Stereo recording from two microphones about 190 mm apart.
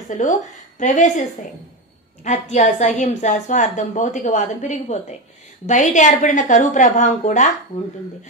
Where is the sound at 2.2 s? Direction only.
35° left (ahead or behind).